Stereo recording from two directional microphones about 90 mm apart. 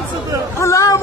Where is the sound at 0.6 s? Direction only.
35° left (ahead or behind).